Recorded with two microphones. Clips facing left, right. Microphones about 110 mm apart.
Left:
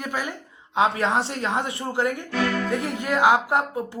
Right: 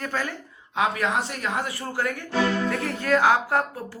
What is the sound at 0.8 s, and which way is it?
A woman's voice, 30° left (ahead or behind).